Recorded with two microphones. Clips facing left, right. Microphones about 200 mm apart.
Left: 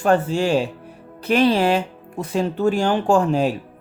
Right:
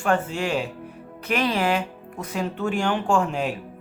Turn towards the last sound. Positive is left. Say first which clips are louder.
# left 6 dB
turn(degrees=35)  # may be behind; listen again after turning